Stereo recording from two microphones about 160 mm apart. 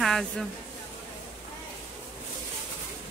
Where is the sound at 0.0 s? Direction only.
Centre (ahead or behind).